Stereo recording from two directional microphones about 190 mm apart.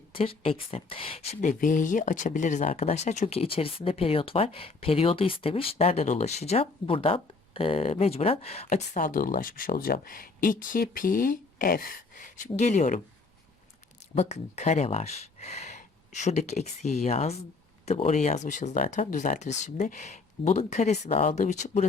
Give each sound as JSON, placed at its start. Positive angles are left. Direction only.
{"t": 0.1, "sound": "speech", "side_deg": 30}
{"t": 14.2, "sound": "speech", "side_deg": 35}